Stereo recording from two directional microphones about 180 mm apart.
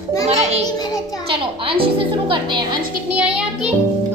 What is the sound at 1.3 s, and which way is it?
Speech, 30° right (ahead or behind).